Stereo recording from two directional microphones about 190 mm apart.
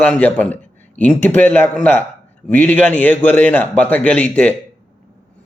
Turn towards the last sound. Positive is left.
turn(degrees=10)  # may be behind; listen again after turning